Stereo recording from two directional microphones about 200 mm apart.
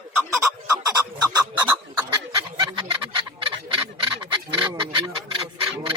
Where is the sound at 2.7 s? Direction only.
25° right (ahead or behind).